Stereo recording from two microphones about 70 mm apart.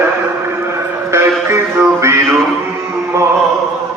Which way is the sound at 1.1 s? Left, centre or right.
Right.